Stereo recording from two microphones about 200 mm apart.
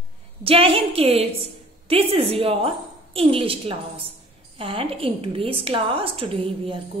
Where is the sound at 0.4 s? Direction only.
30° right (ahead or behind).